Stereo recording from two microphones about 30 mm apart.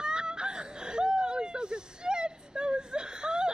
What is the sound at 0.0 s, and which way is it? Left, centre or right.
Whimper, right.